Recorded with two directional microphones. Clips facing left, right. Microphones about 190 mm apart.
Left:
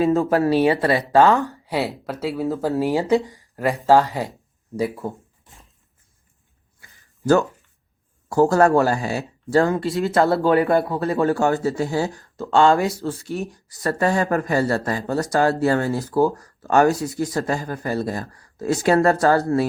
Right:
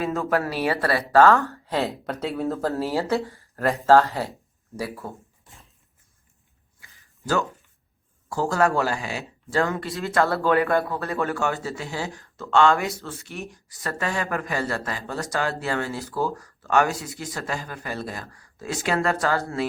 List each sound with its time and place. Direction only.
0.0 s speech: 30° left (ahead or behind); by 1.8 s 15° left (ahead or behind)
1.8 s speech: 5° left (ahead or behind)
8.3 s speech: 40° left (ahead or behind)